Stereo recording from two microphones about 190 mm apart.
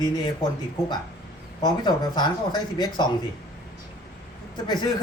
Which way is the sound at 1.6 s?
25° left (ahead or behind).